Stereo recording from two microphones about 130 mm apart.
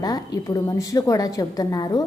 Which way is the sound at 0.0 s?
30° left (ahead or behind).